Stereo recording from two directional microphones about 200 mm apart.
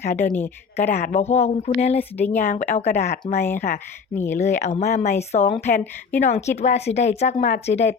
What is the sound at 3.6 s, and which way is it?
Speech, 50° left (ahead or behind).